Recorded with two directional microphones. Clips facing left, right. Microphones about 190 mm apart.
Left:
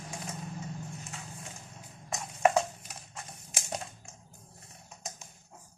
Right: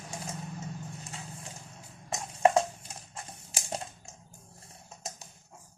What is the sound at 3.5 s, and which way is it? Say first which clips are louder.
Typing: right 1 dB; 30° right (ahead or behind).